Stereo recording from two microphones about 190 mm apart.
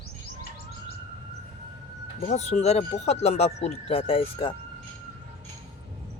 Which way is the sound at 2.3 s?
35° left (ahead or behind).